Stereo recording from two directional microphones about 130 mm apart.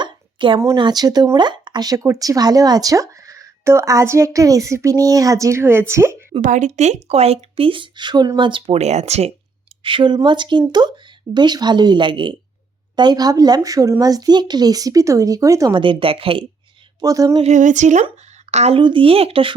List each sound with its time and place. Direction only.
0.0 s a sound: 40° right (ahead or behind)
0.8 s speech: 30° right (ahead or behind)
6.4 s speech: 70° right (ahead or behind)
9.8 s speech: 40° right (ahead or behind)
15.7 s speech: 40° right (ahead or behind)
17.0 s speech: 25° right (ahead or behind)
17.4 s speech: 70° right (ahead or behind)
18.5 s a woman's voice: 55° right (ahead or behind)
18.8 s speech: 40° right (ahead or behind)